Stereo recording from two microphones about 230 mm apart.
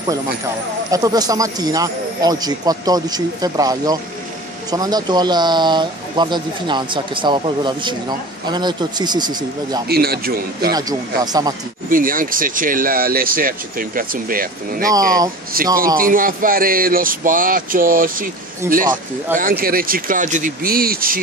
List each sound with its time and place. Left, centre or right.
0.9 s speech: centre
9.8 s a man's voice: right
10.7 s speech: centre
11.9 s speech: right